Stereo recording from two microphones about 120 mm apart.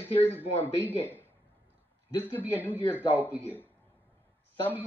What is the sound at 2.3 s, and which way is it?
Speech, 15° left (ahead or behind).